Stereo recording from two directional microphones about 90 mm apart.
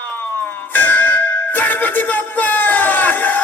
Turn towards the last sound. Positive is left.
turn(degrees=20)  # may be behind; listen again after turning